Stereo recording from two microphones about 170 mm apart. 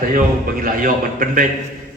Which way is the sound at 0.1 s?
55° right (ahead or behind).